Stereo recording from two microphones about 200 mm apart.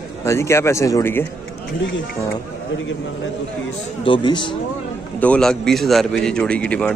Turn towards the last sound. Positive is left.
turn(degrees=5)  # may be behind; listen again after turning